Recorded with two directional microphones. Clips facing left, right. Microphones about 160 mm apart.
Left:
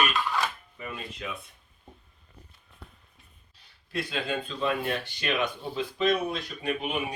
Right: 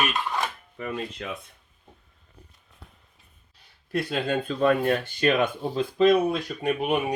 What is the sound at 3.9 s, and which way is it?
Speech, 55° right (ahead or behind).